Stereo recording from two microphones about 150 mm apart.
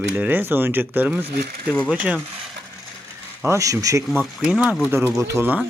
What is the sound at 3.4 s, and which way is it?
Speech, 20° right (ahead or behind).